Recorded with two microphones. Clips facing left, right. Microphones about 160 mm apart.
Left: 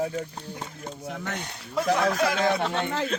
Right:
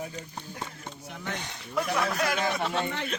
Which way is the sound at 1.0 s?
90° left.